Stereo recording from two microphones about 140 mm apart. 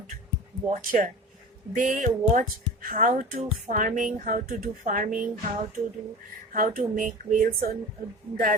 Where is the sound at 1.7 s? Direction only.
70° right (ahead or behind).